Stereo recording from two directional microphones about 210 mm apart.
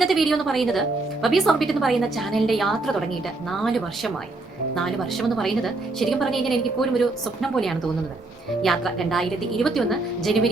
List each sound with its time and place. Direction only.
0.0 s a woman's voice: centre (ahead or behind)
5.3 s a woman's voice: centre (ahead or behind)